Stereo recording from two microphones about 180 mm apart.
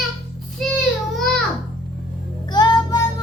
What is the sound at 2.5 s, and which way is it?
Music, 20° left (ahead or behind).